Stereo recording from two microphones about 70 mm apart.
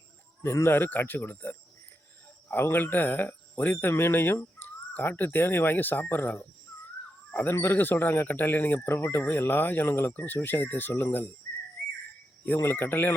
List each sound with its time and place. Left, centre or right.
0.4 s speech: left
12.6 s speech: left